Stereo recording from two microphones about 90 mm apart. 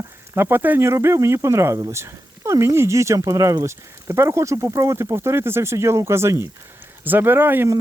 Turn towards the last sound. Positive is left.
turn(degrees=-25)  # may be behind; listen again after turning